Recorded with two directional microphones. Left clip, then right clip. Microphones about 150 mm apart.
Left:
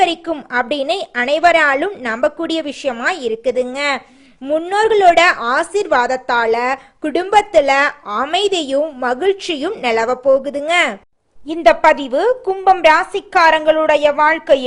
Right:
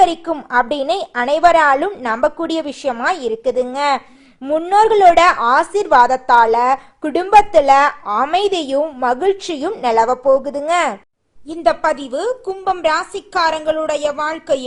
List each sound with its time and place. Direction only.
0.0 s speech: 10° left (ahead or behind)
4.4 s speech: centre (ahead or behind)
11.5 s a woman's voice: centre (ahead or behind)
12.9 s a woman's voice: 25° left (ahead or behind)
14.1 s a woman's voice: 10° right (ahead or behind)